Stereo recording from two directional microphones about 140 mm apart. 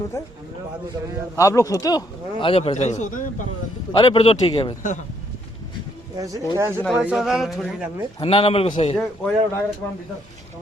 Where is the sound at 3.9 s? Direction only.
40° left (ahead or behind).